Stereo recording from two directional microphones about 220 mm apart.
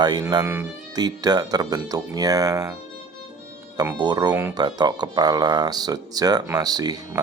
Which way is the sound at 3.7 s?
20° right (ahead or behind).